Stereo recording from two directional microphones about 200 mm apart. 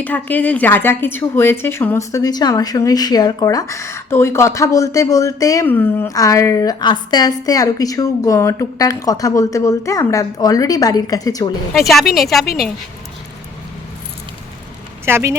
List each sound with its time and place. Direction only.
0.0 s a woman's voice: 10° left (ahead or behind)
11.7 s a woman's voice: centre (ahead or behind)
15.0 s speech: 15° right (ahead or behind)